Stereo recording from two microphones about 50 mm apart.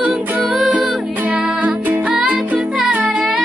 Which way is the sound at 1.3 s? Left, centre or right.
Right.